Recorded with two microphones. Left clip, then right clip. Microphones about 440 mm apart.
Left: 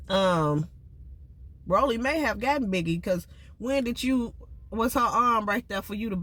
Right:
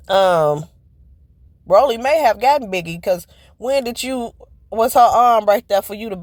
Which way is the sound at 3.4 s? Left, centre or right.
Centre.